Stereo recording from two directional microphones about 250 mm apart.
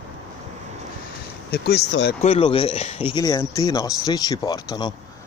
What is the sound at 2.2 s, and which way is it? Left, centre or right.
Speech, left.